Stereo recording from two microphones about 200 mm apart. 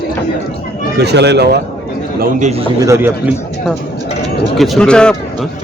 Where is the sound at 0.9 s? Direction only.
55° right (ahead or behind).